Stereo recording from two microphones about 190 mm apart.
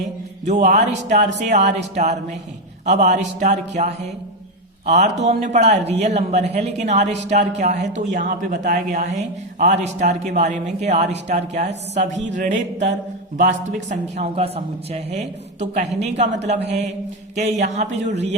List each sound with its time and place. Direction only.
0.4 s speech: 40° right (ahead or behind)